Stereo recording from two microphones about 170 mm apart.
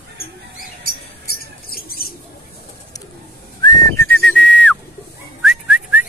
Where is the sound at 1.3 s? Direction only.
60° left (ahead or behind).